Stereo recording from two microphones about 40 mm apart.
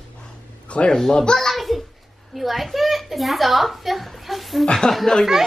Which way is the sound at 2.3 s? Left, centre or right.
Centre.